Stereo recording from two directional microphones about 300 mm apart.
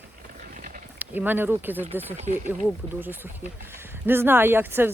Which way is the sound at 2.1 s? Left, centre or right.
Right.